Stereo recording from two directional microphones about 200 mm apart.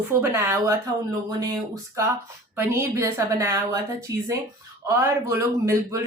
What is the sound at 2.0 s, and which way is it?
A man's voice, 15° right (ahead or behind).